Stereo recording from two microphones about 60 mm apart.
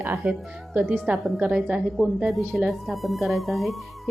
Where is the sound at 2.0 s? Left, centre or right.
Centre.